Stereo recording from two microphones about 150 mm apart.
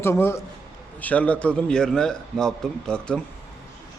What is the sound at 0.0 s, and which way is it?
A man's voice, 15° left (ahead or behind).